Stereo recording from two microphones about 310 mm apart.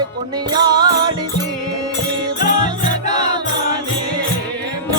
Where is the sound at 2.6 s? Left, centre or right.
Left.